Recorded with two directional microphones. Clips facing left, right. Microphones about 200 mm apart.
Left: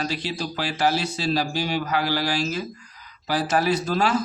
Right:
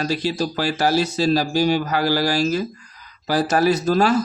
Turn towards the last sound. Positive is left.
turn(degrees=-40)  # may be behind; listen again after turning